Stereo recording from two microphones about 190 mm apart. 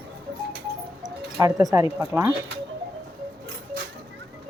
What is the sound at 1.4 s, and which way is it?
Speech, 20° right (ahead or behind).